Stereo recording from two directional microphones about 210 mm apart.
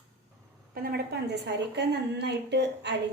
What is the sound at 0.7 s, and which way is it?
A woman's voice, 45° right (ahead or behind).